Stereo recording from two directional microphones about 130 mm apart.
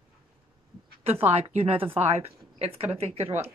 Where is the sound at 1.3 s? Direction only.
50° right (ahead or behind).